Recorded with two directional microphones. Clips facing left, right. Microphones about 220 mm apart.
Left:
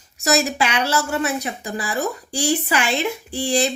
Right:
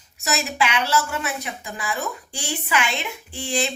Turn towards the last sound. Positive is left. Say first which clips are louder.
# left 5 dB
turn(degrees=40)  # may be behind; listen again after turning